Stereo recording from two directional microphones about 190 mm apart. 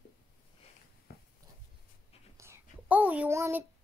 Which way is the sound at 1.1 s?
55° left (ahead or behind).